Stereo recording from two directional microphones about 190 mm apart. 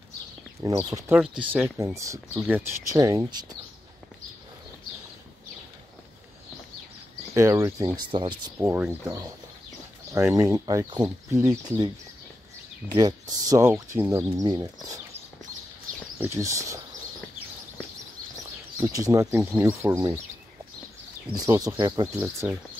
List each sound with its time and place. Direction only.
0.7 s speech: 15° right (ahead or behind)
7.3 s speech: 15° right (ahead or behind)
8.5 s speech: 10° right (ahead or behind)
12.9 s speech: 20° right (ahead or behind)
16.3 s speech: 15° right (ahead or behind)
18.8 s speech: 15° right (ahead or behind)
21.3 s speech: 20° right (ahead or behind)
22.2 s speech: 5° right (ahead or behind)